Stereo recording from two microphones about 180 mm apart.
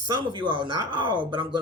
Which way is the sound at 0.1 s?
25° right (ahead or behind).